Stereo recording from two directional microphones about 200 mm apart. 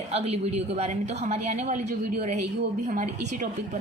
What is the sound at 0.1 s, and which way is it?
A woman's voice, 30° right (ahead or behind).